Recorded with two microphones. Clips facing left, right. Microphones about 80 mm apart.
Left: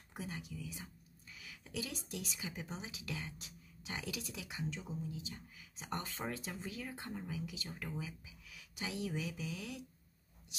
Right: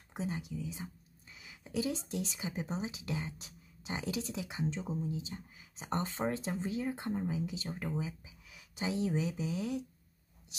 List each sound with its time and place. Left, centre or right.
0.1 s speech: right